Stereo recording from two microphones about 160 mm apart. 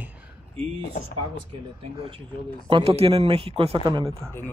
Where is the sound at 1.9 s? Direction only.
35° right (ahead or behind).